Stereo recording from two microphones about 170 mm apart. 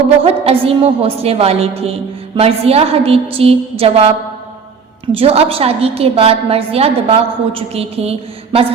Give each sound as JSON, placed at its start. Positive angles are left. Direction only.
{"t": 0.2, "sound": "a woman's voice", "side_deg": -35}
{"t": 5.1, "sound": "a woman's voice", "side_deg": -35}